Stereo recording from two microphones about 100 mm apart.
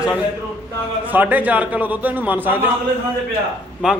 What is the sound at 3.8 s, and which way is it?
Speech, 10° right (ahead or behind).